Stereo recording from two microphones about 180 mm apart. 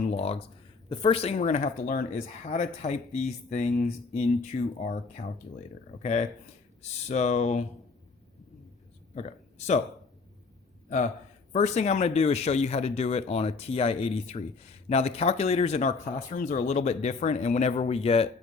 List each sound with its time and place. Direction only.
0.1 s speech: 35° left (ahead or behind)
9.1 s speech: 35° left (ahead or behind)
11.5 s speech: 40° left (ahead or behind)